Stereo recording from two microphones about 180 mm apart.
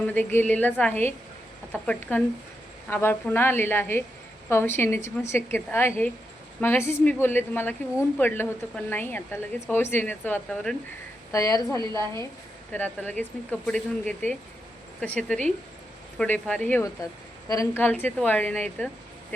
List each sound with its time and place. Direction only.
0.1 s a woman's voice: 10° left (ahead or behind)
11.3 s a woman's voice: 20° left (ahead or behind)